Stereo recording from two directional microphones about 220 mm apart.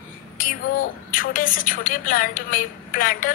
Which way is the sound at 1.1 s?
40° left (ahead or behind).